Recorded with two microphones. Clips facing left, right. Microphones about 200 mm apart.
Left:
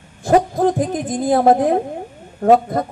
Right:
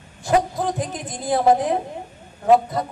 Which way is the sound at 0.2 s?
50° left (ahead or behind).